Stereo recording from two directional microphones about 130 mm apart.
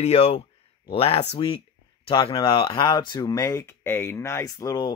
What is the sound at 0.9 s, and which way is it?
Speech, 50° left (ahead or behind).